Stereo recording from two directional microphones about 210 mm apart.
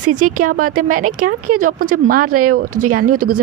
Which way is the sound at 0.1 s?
90° right.